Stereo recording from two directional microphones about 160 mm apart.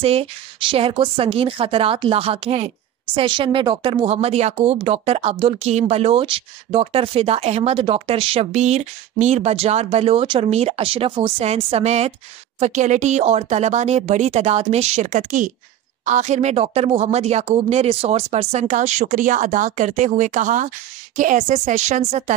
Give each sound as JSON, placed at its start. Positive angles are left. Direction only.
{"t": 0.0, "sound": "speech", "side_deg": -35}